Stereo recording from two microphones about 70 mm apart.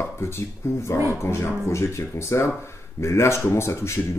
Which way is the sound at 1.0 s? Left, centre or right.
Left.